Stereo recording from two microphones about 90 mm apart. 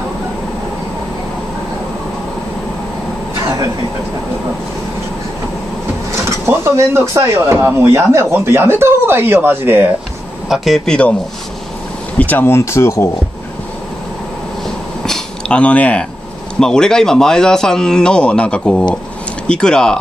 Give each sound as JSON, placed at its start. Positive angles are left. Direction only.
{"t": 6.4, "sound": "speech", "side_deg": -30}
{"t": 10.5, "sound": "speech", "side_deg": 0}
{"t": 12.2, "sound": "speech", "side_deg": 20}
{"t": 15.0, "sound": "a sound", "side_deg": 5}
{"t": 16.5, "sound": "speech", "side_deg": 5}